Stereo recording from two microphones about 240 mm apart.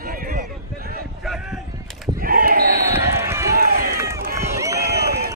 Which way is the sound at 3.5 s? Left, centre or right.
Right.